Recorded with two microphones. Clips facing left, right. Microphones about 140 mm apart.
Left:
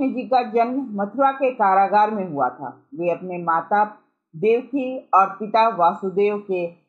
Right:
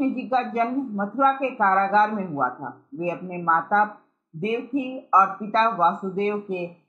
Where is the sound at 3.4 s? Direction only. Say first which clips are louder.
Left 1 dB; 25° left (ahead or behind).